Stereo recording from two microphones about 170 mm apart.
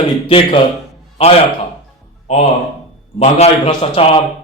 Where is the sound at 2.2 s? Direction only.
35° left (ahead or behind).